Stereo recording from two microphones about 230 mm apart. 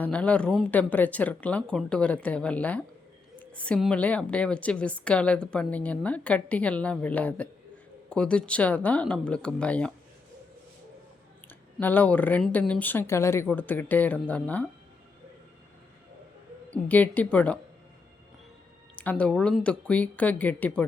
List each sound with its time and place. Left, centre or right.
0.0 s speech: centre
11.8 s speech: centre
16.6 s speech: centre
18.9 s speech: centre